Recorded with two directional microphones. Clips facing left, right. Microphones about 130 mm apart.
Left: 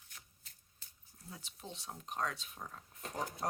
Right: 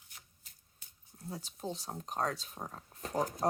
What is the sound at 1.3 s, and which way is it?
Speech, 40° right (ahead or behind).